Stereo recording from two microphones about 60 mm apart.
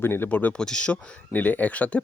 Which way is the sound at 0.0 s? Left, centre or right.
Left.